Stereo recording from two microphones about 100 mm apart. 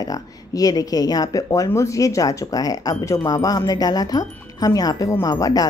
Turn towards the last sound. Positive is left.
turn(degrees=40)  # may be behind; listen again after turning